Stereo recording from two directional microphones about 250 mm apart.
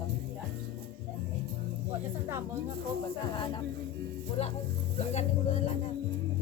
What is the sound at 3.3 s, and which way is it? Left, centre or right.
Music, centre.